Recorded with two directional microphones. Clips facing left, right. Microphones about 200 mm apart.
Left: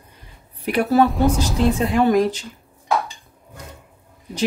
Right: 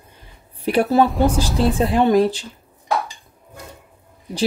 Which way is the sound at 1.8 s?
30° right (ahead or behind).